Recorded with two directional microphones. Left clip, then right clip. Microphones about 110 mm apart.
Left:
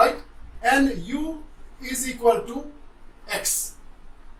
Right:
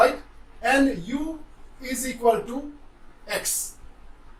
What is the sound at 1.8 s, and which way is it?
Speech, 5° left (ahead or behind).